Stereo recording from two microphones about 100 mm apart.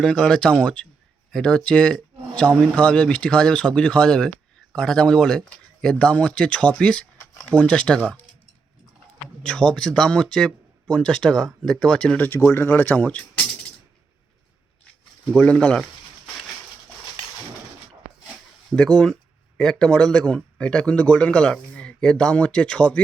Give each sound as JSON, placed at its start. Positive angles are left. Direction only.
{"t": 0.0, "sound": "speech", "side_deg": 5}
{"t": 9.4, "sound": "speech", "side_deg": 10}
{"t": 15.4, "sound": "speech", "side_deg": 10}
{"t": 18.8, "sound": "speech", "side_deg": 5}